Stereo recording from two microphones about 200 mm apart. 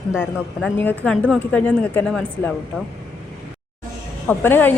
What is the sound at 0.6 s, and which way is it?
A woman's voice, 10° left (ahead or behind).